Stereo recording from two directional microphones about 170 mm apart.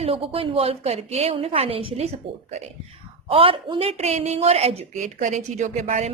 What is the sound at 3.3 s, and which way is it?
Speech, 30° right (ahead or behind).